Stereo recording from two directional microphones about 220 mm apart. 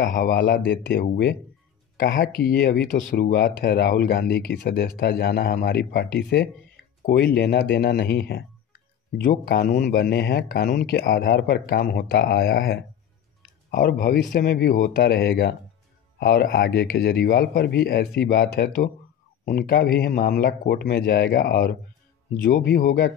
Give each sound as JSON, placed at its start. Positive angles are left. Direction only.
{"t": 0.1, "sound": "speech", "side_deg": 45}